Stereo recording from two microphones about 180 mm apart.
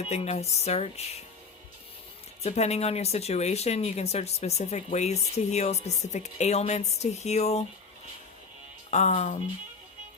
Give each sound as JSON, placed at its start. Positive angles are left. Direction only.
{"t": 0.0, "sound": "speech", "side_deg": 35}
{"t": 2.4, "sound": "speech", "side_deg": 35}
{"t": 8.9, "sound": "speech", "side_deg": 40}